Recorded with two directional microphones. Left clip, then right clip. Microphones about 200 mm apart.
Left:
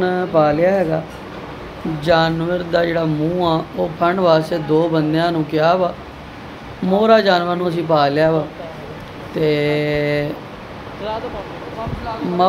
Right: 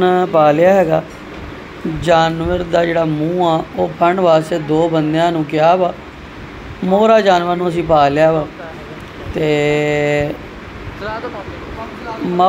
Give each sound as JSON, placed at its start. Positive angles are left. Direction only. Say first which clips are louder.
{"t": 0.0, "sound": "speech", "louder": "right 4 dB", "side_deg": -10}
{"t": 2.0, "sound": "speech", "louder": "right 3 dB", "side_deg": -5}
{"t": 6.9, "sound": "speech", "louder": "right 2 dB", "side_deg": -5}
{"t": 9.4, "sound": "speech", "louder": "right 3 dB", "side_deg": 0}